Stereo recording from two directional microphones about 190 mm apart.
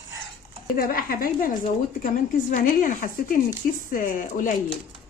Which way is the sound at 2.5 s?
45° left (ahead or behind).